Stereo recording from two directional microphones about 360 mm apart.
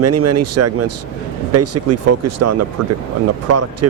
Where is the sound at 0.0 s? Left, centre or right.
Right.